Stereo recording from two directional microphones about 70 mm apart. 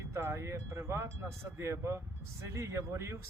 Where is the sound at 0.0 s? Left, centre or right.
Right.